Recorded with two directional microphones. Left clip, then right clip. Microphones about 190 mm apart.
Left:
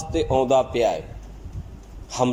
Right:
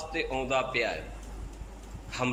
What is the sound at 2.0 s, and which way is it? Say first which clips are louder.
Speech: left 9 dB; 35° left (ahead or behind).